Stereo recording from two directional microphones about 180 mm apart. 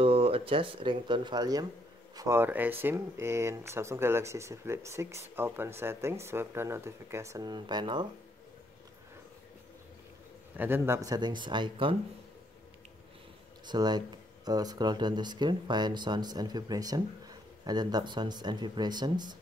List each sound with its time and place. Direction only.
0.0 s speech: 30° right (ahead or behind)
10.5 s speech: 10° right (ahead or behind); by 12.0 s 25° right (ahead or behind)
13.7 s speech: 25° right (ahead or behind)